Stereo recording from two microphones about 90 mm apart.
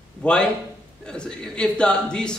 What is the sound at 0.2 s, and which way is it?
A man's voice, 10° left (ahead or behind).